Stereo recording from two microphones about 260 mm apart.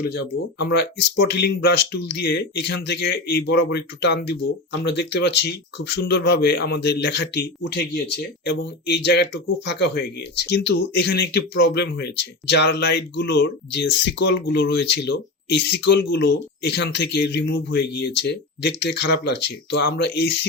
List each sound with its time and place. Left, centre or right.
0.0 s speech: left